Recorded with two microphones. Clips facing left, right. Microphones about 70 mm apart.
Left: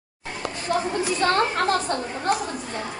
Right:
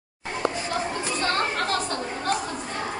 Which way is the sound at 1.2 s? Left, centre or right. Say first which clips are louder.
Left 5 dB; left.